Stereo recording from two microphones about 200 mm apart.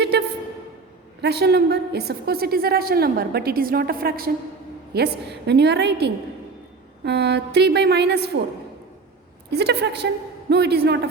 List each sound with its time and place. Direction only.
0.0 s a sound: 55° right (ahead or behind)
1.2 s a woman's voice: 55° right (ahead or behind)
9.5 s a woman's voice: 55° right (ahead or behind)